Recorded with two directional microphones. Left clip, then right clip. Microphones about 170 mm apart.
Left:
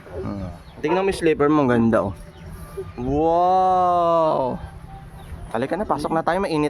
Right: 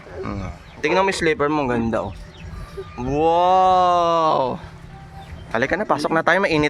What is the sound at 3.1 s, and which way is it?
Speech, 30° left (ahead or behind).